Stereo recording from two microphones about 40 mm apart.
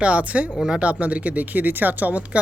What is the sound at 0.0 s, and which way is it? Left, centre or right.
Speech, right.